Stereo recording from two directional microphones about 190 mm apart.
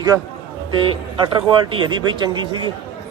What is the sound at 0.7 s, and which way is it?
A man's voice, 25° right (ahead or behind).